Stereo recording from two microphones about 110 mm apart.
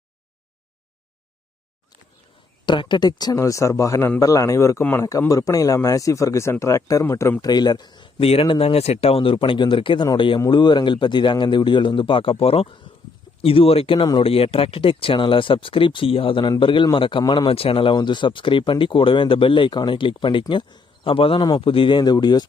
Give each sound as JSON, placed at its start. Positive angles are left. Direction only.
{"t": 2.6, "sound": "speech", "side_deg": 45}
{"t": 7.4, "sound": "speech", "side_deg": 40}
{"t": 8.2, "sound": "speech", "side_deg": 60}
{"t": 17.5, "sound": "speech", "side_deg": 60}